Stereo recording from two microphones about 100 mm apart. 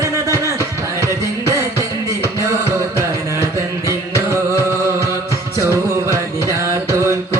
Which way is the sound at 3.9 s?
30° right (ahead or behind).